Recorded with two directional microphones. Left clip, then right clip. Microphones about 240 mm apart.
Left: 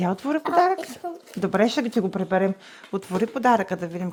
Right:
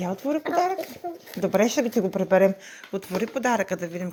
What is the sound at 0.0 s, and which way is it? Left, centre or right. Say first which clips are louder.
A woman's voice: left 2 dB; centre.